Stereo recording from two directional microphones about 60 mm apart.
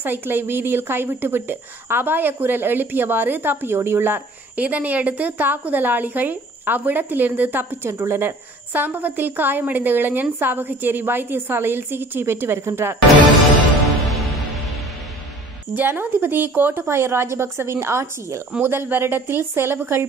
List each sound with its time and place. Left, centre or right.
0.0 s speech: right
4.6 s speech: right
7.9 s a woman's voice: right
8.2 s speech: right
15.7 s a woman's voice: right
18.6 s speech: right